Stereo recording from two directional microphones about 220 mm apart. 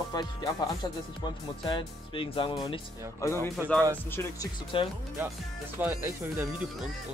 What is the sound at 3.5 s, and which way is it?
Speech, centre (ahead or behind).